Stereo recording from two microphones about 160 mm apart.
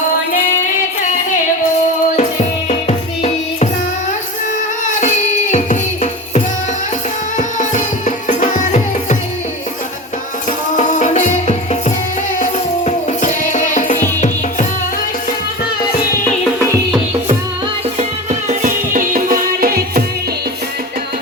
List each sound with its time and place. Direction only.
2.1 s music: 45° left (ahead or behind)
5.5 s music: 45° left (ahead or behind)
10.8 s music: 50° left (ahead or behind)
18.3 s music: 50° right (ahead or behind); by 20.1 s 65° right (ahead or behind)